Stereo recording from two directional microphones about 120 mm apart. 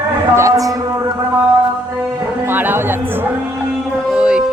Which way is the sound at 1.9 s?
20° right (ahead or behind).